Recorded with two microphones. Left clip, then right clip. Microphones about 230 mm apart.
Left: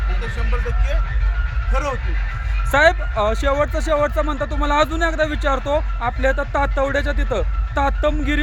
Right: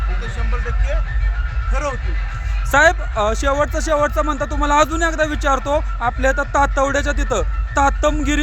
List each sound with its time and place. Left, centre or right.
1.7 s speech: centre